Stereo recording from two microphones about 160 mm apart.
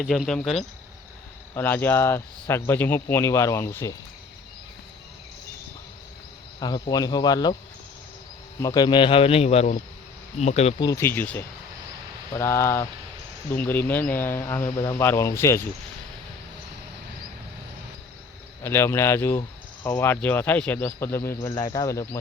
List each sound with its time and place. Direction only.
0.0 s speech: centre (ahead or behind)
6.6 s speech: 25° left (ahead or behind)
8.6 s speech: 25° left (ahead or behind); by 10.8 s 40° left (ahead or behind)
10.8 s speech: 20° left (ahead or behind)
18.6 s speech: 15° left (ahead or behind)